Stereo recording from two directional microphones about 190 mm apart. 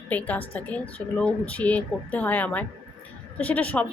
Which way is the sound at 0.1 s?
10° left (ahead or behind).